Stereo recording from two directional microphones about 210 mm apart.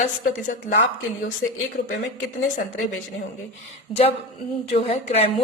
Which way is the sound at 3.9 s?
25° left (ahead or behind).